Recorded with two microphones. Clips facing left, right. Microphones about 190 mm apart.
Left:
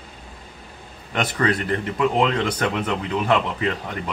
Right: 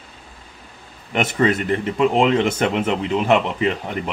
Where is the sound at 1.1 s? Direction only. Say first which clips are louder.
Right 4 dB; 20° right (ahead or behind).